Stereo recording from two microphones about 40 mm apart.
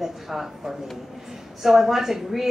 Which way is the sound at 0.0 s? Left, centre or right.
Centre.